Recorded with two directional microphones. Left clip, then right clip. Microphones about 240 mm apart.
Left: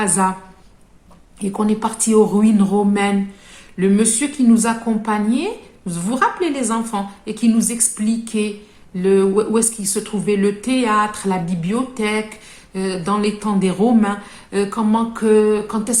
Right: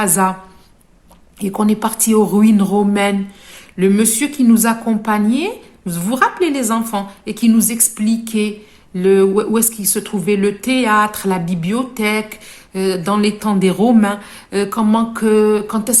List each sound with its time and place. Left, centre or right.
0.0 s speech: right
1.4 s speech: right